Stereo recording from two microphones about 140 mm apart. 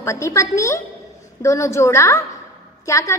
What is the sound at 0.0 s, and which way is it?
A woman's voice, 20° left (ahead or behind).